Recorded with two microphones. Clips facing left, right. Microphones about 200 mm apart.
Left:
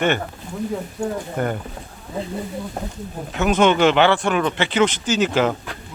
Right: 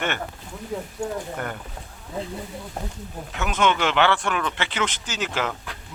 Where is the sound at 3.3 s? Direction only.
30° left (ahead or behind).